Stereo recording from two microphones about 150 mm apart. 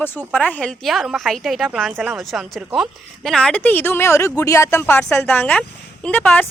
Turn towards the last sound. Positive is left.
turn(degrees=10)  # may be behind; listen again after turning